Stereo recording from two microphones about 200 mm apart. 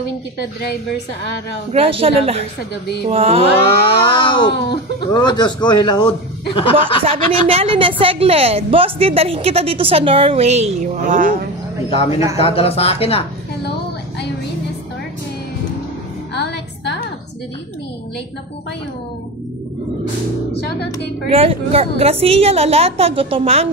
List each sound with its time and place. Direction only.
1.7 s a woman's voice: 30° right (ahead or behind)
4.2 s speech: 25° left (ahead or behind)
7.1 s a woman's voice: 30° right (ahead or behind)
11.9 s speech: 25° left (ahead or behind)
16.3 s music: 55° left (ahead or behind)
21.3 s a woman's voice: 30° right (ahead or behind)